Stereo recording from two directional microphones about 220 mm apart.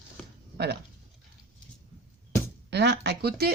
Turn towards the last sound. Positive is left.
turn(degrees=-45)  # may be behind; listen again after turning